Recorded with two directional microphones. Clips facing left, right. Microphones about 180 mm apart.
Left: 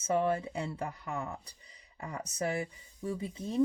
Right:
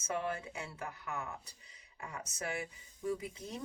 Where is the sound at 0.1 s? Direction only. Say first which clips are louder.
Left 8 dB; 30° left (ahead or behind).